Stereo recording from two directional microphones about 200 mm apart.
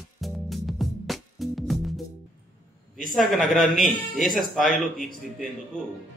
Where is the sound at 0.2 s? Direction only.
Centre (ahead or behind).